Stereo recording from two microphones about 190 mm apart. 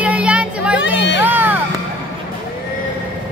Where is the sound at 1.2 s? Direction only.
10° right (ahead or behind).